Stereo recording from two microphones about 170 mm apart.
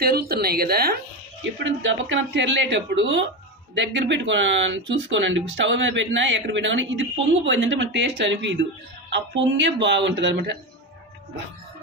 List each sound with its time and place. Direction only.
0.0 s speech: 65° right (ahead or behind)
1.6 s speech: 90° right